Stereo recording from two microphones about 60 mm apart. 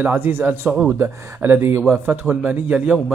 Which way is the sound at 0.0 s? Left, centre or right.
Right.